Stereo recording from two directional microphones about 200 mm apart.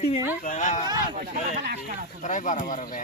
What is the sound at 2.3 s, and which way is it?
Speech, 40° left (ahead or behind).